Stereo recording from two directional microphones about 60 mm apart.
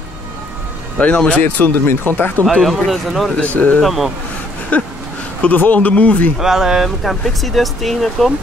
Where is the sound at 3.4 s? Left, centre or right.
Left.